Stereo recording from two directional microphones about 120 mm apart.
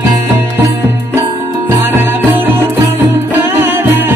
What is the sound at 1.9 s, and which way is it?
Music, 20° right (ahead or behind).